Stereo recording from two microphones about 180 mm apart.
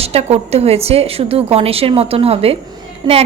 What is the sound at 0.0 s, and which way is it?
Speech, 35° right (ahead or behind).